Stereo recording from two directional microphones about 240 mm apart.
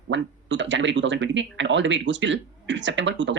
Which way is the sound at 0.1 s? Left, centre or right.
Right.